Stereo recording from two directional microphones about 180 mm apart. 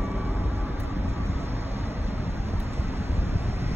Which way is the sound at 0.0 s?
35° right (ahead or behind).